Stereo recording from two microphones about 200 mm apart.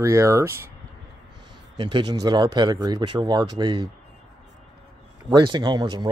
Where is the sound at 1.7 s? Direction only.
20° right (ahead or behind).